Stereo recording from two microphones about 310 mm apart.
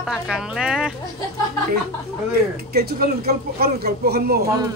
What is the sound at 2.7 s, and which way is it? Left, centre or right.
Speech, right.